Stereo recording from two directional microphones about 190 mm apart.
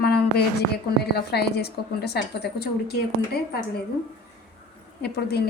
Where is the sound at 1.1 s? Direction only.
60° left (ahead or behind).